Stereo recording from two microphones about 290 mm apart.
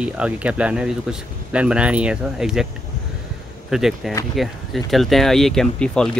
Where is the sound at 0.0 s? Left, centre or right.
Centre.